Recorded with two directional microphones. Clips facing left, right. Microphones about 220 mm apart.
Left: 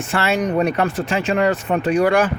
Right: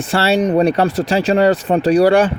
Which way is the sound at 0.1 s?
35° right (ahead or behind).